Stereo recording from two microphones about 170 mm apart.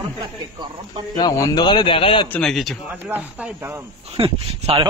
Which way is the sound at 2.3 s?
Centre (ahead or behind).